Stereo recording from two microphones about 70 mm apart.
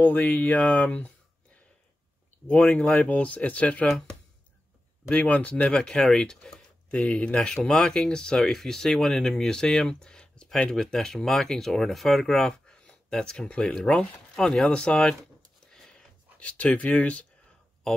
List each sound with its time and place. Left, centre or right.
0.0 s speech: left
5.1 s speech: left
15.7 s a sound: centre